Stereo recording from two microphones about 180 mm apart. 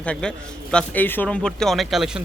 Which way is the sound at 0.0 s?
5° left (ahead or behind).